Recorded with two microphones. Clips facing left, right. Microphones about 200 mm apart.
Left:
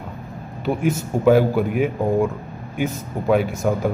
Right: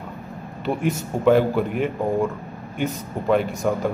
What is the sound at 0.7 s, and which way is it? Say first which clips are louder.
A man's voice: left 2 dB; 5° left (ahead or behind).